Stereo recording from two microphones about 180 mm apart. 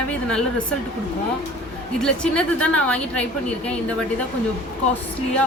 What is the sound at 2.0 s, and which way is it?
A woman's voice, 5° left (ahead or behind).